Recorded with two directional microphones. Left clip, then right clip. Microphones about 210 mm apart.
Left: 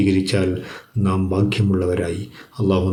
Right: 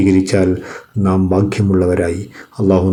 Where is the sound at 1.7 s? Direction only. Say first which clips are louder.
Right 8 dB; 10° right (ahead or behind).